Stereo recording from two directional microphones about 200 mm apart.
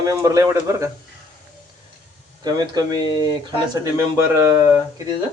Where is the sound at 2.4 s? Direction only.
20° right (ahead or behind).